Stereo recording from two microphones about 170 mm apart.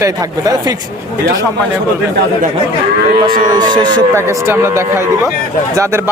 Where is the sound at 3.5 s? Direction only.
25° right (ahead or behind).